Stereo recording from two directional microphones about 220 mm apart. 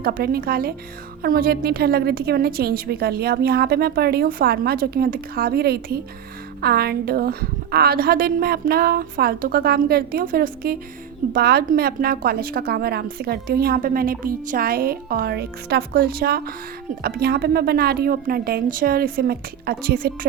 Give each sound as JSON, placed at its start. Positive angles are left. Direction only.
{"t": 0.0, "sound": "a woman's voice", "side_deg": -45}